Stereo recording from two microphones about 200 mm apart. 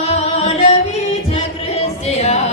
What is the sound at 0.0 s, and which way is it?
Music, 30° left (ahead or behind).